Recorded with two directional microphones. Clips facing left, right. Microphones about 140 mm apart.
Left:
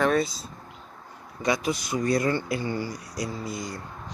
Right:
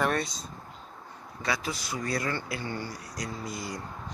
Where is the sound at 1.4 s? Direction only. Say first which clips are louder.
Left 6 dB; 20° left (ahead or behind); by 3.7 s centre (ahead or behind).